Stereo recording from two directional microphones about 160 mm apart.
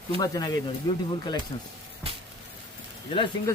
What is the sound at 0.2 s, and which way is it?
Speech, 25° left (ahead or behind).